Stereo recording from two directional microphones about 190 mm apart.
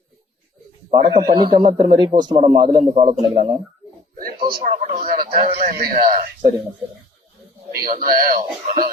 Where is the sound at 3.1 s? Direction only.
35° right (ahead or behind).